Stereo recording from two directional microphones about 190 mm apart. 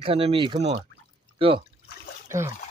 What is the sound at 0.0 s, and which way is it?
Speech, 30° right (ahead or behind).